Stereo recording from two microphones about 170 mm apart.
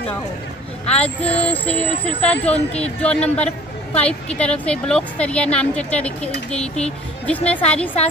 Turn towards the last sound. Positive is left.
turn(degrees=5)  # may be behind; listen again after turning